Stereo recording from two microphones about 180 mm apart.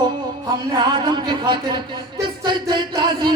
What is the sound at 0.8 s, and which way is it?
Speech, 25° right (ahead or behind).